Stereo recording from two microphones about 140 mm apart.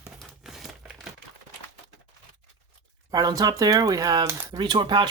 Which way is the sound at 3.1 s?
25° right (ahead or behind).